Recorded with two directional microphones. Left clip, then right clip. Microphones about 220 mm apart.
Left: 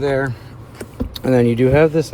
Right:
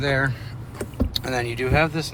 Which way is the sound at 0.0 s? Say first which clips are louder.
Left 4 dB; 25° left (ahead or behind).